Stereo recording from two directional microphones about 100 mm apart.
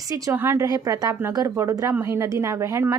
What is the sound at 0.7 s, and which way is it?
A woman's voice, 35° right (ahead or behind).